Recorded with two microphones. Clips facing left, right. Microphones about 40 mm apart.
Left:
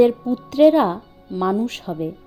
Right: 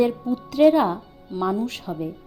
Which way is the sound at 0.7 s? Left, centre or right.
Left.